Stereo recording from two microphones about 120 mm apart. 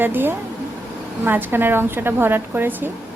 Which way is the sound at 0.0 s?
15° right (ahead or behind).